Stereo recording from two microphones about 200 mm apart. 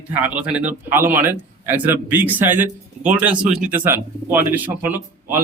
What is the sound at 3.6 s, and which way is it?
Speech, 40° right (ahead or behind).